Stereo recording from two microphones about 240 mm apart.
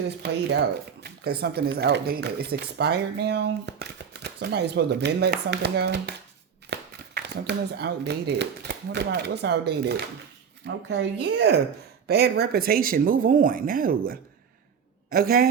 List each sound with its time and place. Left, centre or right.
1.2 s speech: right
15.1 s speech: right